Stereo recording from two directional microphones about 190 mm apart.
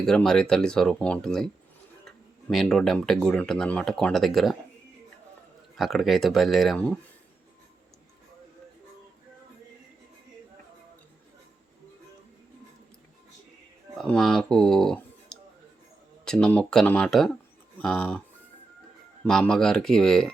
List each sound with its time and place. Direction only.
0.0 s speech: 5° left (ahead or behind)
5.7 s speech: centre (ahead or behind)
13.9 s speech: centre (ahead or behind)
19.2 s speech: 5° left (ahead or behind)